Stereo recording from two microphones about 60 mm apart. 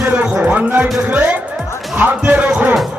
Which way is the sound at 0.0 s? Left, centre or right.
Right.